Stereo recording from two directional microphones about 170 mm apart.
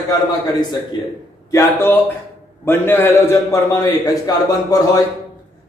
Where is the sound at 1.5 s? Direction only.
15° left (ahead or behind).